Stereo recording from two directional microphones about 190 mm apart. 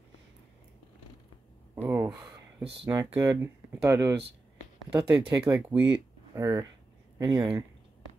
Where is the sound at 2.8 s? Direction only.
15° right (ahead or behind).